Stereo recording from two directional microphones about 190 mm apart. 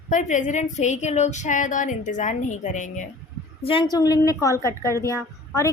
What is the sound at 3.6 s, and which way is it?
A woman's voice, 25° left (ahead or behind).